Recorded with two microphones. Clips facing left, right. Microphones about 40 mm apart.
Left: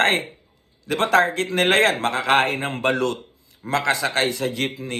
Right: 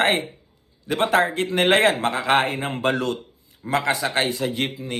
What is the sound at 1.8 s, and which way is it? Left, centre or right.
A man's voice, left.